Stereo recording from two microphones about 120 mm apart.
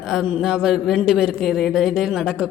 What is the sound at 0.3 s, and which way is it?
A man's voice, 5° right (ahead or behind).